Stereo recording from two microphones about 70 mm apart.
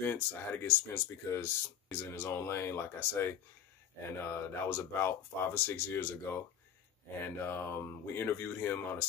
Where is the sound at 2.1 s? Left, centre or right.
Left.